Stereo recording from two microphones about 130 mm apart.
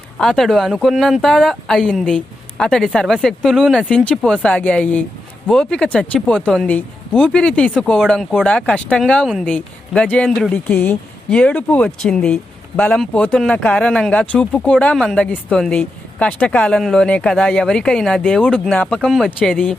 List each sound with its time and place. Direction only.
0.2 s speech: centre (ahead or behind)
10.7 s speech: 15° left (ahead or behind)